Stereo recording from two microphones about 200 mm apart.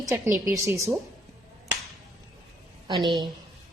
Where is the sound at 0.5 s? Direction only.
15° right (ahead or behind).